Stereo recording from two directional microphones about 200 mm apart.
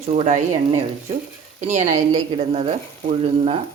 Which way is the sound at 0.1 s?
35° right (ahead or behind).